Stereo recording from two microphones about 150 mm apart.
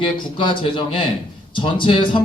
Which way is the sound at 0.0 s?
35° left (ahead or behind).